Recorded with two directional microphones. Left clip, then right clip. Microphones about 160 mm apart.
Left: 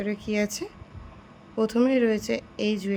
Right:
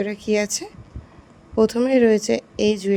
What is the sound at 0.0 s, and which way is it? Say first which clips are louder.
A woman's voice: right 6 dB; 45° right (ahead or behind).